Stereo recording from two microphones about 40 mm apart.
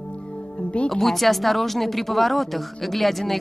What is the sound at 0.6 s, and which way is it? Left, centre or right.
Music, left.